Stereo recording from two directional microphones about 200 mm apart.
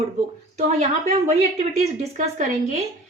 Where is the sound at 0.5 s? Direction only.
35° right (ahead or behind).